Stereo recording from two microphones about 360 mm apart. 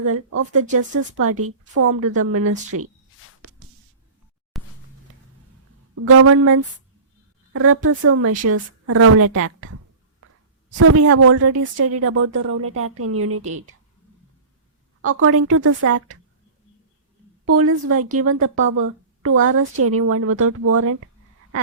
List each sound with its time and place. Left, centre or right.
0.0 s a woman's voice: right
4.5 s a sound: centre
5.9 s a woman's voice: right
10.8 s a woman's voice: right
15.0 s a woman's voice: right
17.4 s a woman's voice: right